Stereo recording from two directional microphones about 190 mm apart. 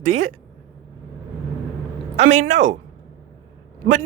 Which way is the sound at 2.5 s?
40° right (ahead or behind).